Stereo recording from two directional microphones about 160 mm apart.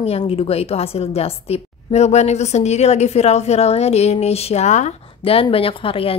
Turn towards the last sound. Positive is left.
turn(degrees=35)  # may be behind; listen again after turning